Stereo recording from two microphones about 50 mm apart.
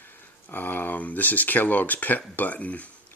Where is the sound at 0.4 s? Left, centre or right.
Left.